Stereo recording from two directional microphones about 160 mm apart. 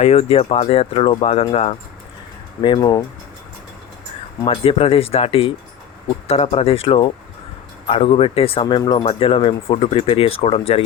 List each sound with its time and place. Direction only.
0.0 s speech: 40° left (ahead or behind)
2.6 s speech: 30° left (ahead or behind)
4.4 s speech: 35° left (ahead or behind)
8.6 s speech: 25° left (ahead or behind)